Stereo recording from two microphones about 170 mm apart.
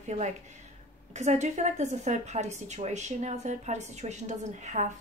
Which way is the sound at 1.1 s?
40° right (ahead or behind).